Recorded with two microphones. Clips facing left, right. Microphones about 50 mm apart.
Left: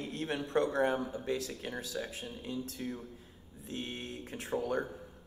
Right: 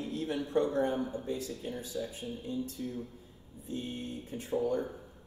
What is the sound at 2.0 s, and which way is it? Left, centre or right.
Speech, left.